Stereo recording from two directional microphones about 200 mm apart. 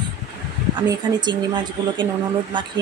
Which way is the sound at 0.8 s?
20° right (ahead or behind).